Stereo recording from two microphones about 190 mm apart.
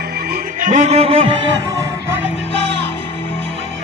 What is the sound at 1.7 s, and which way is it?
Music, 15° right (ahead or behind).